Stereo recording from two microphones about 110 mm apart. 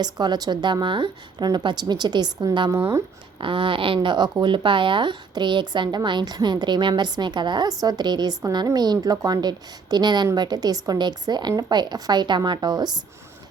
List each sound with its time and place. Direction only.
0.0 s speech: 40° right (ahead or behind)
3.4 s speech: 50° right (ahead or behind)